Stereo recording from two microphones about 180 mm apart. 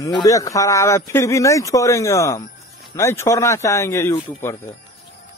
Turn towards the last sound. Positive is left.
turn(degrees=15)  # may be behind; listen again after turning